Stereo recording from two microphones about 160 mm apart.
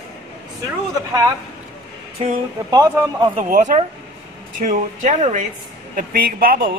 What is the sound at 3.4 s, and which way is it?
Speech, 50° right (ahead or behind).